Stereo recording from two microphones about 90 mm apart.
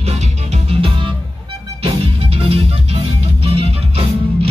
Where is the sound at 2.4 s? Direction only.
90° right.